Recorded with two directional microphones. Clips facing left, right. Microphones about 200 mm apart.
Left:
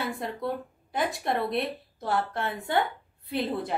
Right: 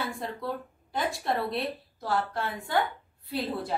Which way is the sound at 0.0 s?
20° left (ahead or behind).